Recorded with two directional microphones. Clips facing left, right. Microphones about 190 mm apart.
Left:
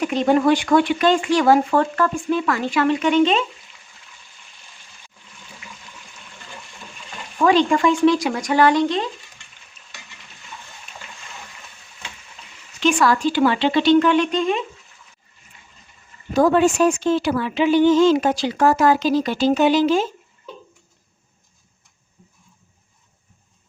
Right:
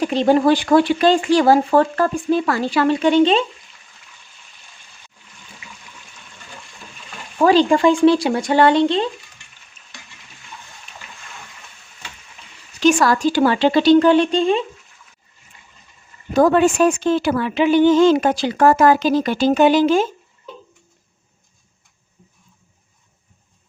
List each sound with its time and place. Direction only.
0.0 s speech: 30° right (ahead or behind)
7.4 s speech: 35° right (ahead or behind)
12.8 s speech: 40° right (ahead or behind)
16.3 s a woman's voice: 55° right (ahead or behind)